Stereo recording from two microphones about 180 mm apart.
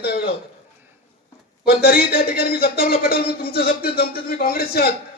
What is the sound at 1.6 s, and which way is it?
Speech, 55° left (ahead or behind).